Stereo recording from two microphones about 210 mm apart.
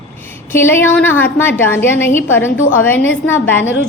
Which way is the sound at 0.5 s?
10° left (ahead or behind).